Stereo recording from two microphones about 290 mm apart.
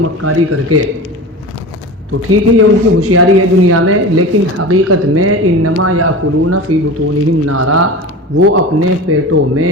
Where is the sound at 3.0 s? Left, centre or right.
Right.